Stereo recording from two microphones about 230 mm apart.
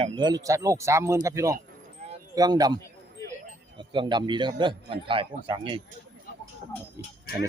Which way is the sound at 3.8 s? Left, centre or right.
Right.